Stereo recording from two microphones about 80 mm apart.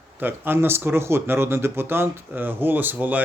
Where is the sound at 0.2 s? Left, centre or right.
Right.